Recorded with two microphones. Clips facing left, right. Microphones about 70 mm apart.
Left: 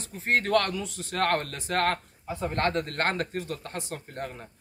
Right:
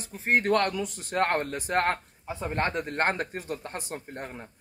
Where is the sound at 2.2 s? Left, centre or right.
Centre.